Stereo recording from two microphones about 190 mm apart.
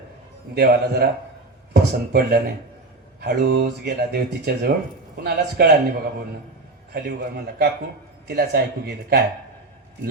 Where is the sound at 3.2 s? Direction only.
55° right (ahead or behind).